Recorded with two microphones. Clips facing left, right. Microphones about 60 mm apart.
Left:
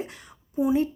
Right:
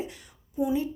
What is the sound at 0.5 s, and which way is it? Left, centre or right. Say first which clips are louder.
Speech: left 4 dB; left.